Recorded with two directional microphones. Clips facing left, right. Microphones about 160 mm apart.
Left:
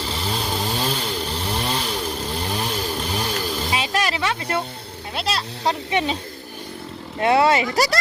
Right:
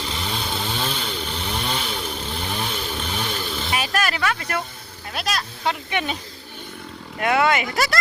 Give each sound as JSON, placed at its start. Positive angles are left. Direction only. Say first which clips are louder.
{"t": 0.0, "sound": "chainsaw", "louder": "left 2 dB", "side_deg": 35}
{"t": 3.7, "sound": "music", "louder": "right 1 dB", "side_deg": 25}
{"t": 5.1, "sound": "speech", "louder": "left 1 dB", "side_deg": 30}
{"t": 7.2, "sound": "speech", "louder": "left 3 dB", "side_deg": 30}